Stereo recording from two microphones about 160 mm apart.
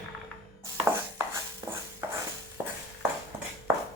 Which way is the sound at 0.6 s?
15° right (ahead or behind).